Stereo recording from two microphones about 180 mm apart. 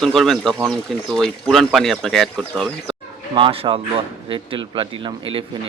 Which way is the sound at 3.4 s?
30° right (ahead or behind).